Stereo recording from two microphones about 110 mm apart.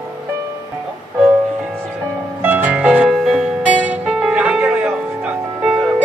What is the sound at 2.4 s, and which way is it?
Music, 15° right (ahead or behind).